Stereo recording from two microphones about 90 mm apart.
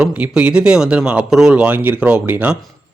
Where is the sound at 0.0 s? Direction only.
15° right (ahead or behind).